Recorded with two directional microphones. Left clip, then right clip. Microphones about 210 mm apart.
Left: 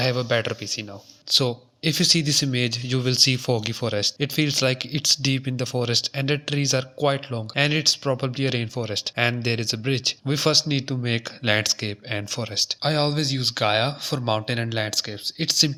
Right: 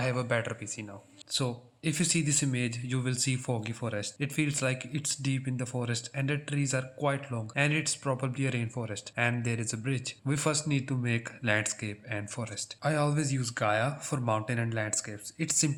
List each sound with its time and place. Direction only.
0.0 s speech: 25° left (ahead or behind)